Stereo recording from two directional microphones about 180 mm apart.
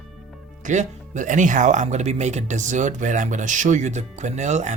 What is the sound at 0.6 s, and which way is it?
Speech, 40° right (ahead or behind).